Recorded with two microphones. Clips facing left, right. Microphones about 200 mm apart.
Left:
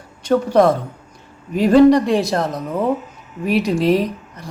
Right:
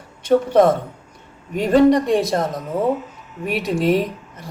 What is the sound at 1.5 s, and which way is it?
A woman's voice, centre (ahead or behind).